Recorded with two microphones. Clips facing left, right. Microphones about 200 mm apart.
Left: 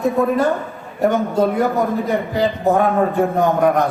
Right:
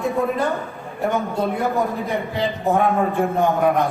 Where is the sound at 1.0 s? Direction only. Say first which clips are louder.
Left 5 dB; 40° left (ahead or behind).